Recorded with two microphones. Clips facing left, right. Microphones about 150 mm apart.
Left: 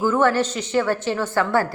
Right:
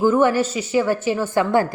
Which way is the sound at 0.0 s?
15° right (ahead or behind).